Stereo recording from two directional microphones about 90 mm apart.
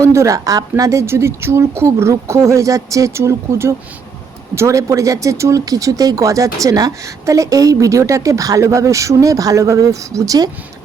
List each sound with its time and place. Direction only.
0.0 s speech: 35° right (ahead or behind)